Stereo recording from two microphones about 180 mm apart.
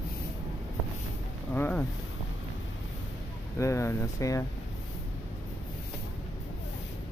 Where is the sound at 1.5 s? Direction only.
10° left (ahead or behind).